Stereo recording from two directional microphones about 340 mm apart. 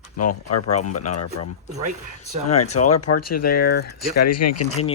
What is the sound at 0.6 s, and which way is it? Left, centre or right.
Speech, centre.